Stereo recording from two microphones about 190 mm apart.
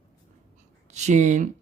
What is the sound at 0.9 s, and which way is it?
Speech, 40° right (ahead or behind).